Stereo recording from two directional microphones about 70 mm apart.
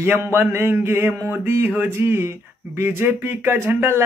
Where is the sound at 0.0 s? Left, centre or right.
Right.